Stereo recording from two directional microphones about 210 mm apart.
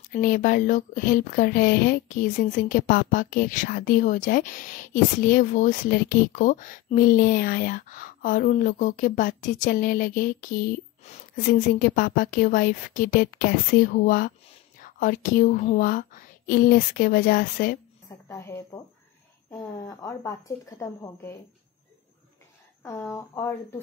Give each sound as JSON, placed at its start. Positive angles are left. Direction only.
{"t": 0.1, "sound": "speech", "side_deg": 40}
{"t": 18.3, "sound": "a woman's voice", "side_deg": 15}
{"t": 22.8, "sound": "a woman's voice", "side_deg": 15}